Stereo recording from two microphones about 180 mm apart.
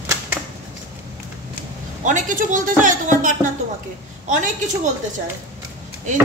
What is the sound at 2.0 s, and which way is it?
Speech, 45° right (ahead or behind).